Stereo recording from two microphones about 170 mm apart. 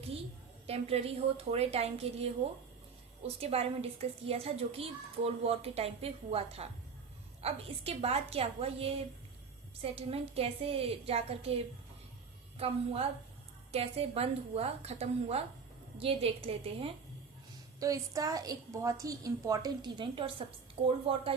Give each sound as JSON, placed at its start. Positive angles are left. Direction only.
{"t": 0.7, "sound": "a woman's voice", "side_deg": -35}
{"t": 3.4, "sound": "a woman's voice", "side_deg": -35}
{"t": 17.7, "sound": "a woman's voice", "side_deg": -20}